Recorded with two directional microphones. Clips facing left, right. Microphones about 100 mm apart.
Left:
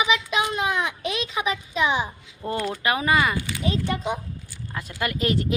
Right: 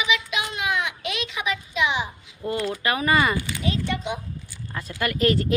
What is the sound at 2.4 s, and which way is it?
Speech, 30° left (ahead or behind).